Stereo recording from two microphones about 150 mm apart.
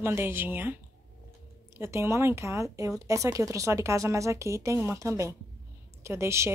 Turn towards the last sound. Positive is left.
turn(degrees=-20)  # may be behind; listen again after turning